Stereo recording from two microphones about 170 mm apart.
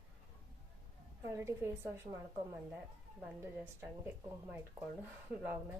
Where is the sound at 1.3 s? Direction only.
15° right (ahead or behind).